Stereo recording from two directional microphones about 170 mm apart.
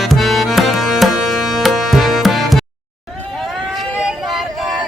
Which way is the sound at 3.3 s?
Centre (ahead or behind).